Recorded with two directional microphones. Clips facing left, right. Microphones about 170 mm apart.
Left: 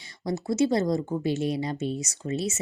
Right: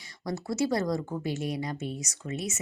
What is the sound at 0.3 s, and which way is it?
Speech, 25° left (ahead or behind).